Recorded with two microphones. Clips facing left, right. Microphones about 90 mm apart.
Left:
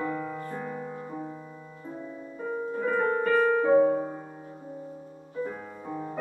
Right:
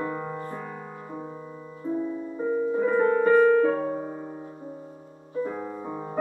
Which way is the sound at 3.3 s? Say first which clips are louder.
Right 5 dB; centre (ahead or behind).